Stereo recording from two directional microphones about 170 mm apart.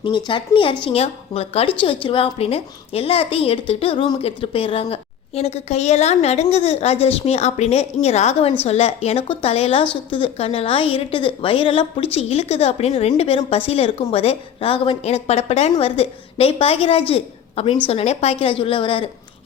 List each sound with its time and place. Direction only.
0.3 s a woman's voice: 30° left (ahead or behind)